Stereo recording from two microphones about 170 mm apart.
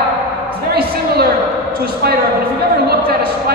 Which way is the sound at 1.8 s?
65° right (ahead or behind).